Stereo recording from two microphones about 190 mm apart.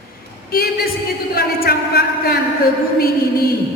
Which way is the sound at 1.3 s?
60° left (ahead or behind).